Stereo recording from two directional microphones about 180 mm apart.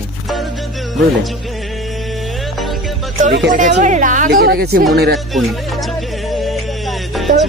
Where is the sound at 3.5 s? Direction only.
45° right (ahead or behind); by 4.8 s 65° right (ahead or behind).